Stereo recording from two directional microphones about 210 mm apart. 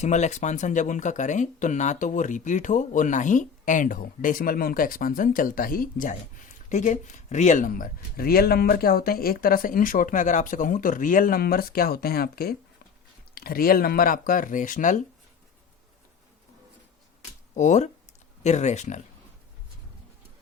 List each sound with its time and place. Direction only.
0.0 s speech: 35° left (ahead or behind)
17.5 s speech: 35° left (ahead or behind)